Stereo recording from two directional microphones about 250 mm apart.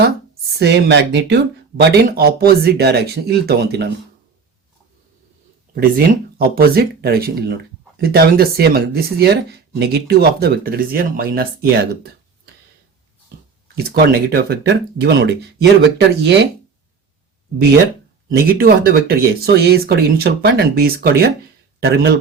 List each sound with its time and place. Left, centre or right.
0.6 s speech: right
6.6 s speech: right
13.7 s speech: right
18.3 s speech: right